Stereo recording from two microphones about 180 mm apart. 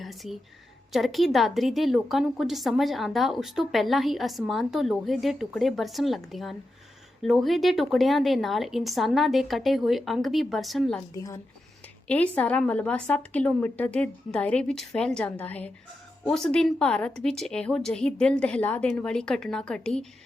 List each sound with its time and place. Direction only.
0.0 s a woman's voice: centre (ahead or behind)
11.1 s a woman's voice: 20° left (ahead or behind)
12.0 s a woman's voice: 10° left (ahead or behind)